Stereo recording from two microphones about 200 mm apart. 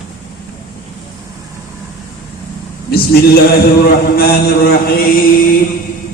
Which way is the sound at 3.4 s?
50° left (ahead or behind).